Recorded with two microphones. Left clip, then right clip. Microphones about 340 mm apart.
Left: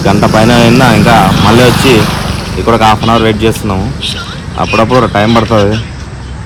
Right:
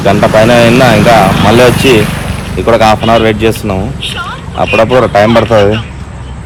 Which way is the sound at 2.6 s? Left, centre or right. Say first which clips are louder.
Right 1 dB; centre.